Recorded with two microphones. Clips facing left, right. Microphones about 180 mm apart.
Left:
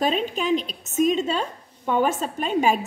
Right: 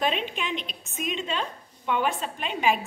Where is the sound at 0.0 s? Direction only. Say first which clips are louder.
Left 5 dB; 40° left (ahead or behind).